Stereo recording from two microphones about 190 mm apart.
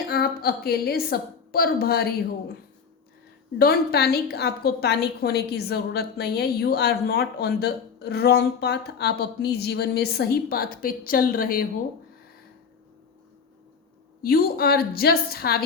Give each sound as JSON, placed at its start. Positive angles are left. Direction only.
{"t": 0.1, "sound": "a woman's voice", "side_deg": 55}
{"t": 3.6, "sound": "a woman's voice", "side_deg": 55}
{"t": 14.2, "sound": "a woman's voice", "side_deg": 50}